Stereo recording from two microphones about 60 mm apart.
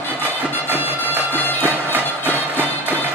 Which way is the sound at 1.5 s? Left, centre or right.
Left.